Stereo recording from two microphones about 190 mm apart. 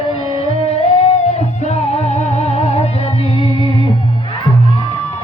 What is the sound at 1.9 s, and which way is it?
Music, 35° left (ahead or behind).